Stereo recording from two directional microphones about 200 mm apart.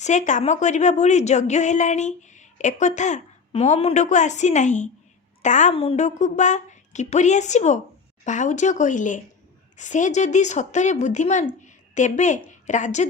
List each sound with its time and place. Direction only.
0.0 s a woman's voice: 35° left (ahead or behind)
11.6 s a sound: 35° left (ahead or behind)
12.5 s a woman's voice: 40° left (ahead or behind)